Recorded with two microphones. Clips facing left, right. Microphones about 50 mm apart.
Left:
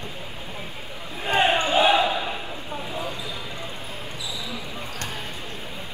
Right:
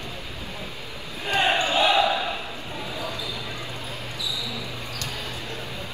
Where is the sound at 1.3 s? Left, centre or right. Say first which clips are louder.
Left 2 dB; left.